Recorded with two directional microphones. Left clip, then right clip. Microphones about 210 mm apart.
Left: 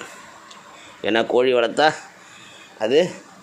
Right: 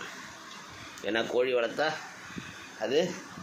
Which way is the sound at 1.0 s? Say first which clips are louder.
Left 10 dB; 45° left (ahead or behind).